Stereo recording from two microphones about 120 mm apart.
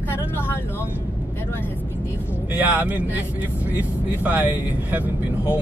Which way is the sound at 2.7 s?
15° right (ahead or behind).